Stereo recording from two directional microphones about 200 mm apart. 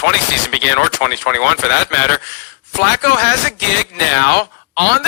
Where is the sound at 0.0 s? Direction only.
55° left (ahead or behind).